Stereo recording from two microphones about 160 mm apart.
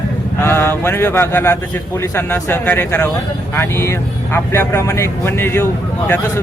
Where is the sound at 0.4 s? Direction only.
15° left (ahead or behind).